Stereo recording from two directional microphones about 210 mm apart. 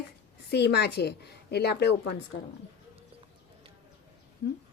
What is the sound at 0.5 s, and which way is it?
A woman's voice, 55° left (ahead or behind).